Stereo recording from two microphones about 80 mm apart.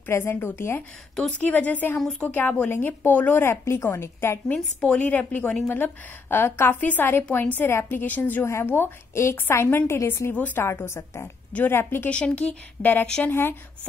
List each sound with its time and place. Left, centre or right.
0.1 s a woman's voice: left
2.0 s speech: centre
2.2 s a woman's voice: left
4.7 s a woman's voice: centre
10.6 s a woman's voice: left
12.1 s a woman's voice: centre